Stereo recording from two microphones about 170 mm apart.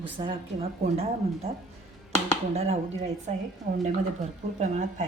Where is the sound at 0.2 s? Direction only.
35° right (ahead or behind).